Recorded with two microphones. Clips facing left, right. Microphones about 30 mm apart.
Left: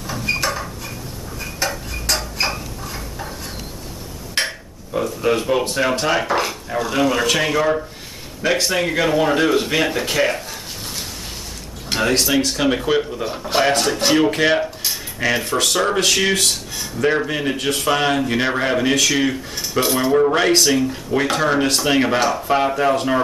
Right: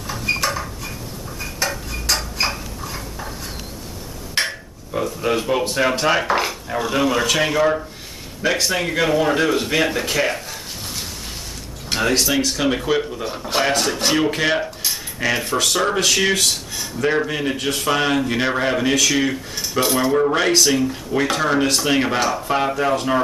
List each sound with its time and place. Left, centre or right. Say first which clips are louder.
0.0 s dishes: even; centre
4.4 s speech: even; centre